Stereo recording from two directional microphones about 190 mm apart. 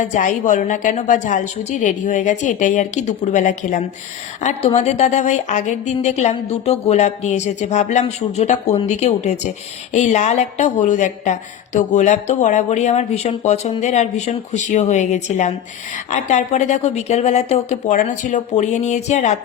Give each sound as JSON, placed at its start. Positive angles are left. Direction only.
{"t": 0.0, "sound": "a woman's voice", "side_deg": 40}